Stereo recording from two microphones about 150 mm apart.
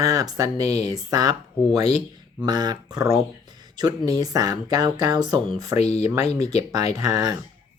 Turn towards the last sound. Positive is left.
turn(degrees=-25)  # may be behind; listen again after turning